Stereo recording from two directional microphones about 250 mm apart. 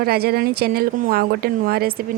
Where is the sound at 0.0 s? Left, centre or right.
Right.